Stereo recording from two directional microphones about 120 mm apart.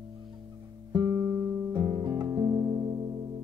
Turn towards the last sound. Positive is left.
turn(degrees=-30)  # may be behind; listen again after turning